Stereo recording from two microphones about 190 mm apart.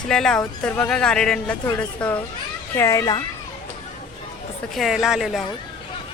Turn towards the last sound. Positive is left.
turn(degrees=0)  # may be behind; listen again after turning